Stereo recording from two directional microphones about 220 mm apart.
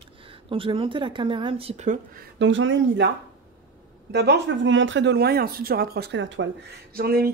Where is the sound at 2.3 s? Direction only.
55° right (ahead or behind).